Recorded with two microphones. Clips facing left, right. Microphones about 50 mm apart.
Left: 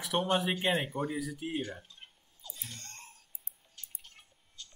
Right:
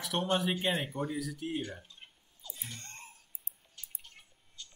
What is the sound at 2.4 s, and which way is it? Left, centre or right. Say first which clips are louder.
Screaming: even; centre.